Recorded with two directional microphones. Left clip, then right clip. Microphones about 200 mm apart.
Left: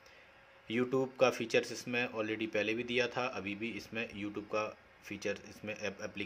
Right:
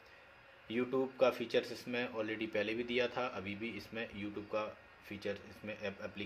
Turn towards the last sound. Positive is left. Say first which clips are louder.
# left 3 dB
turn(degrees=30)  # may be behind; listen again after turning